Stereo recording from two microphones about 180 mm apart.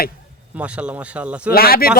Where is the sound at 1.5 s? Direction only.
55° left (ahead or behind).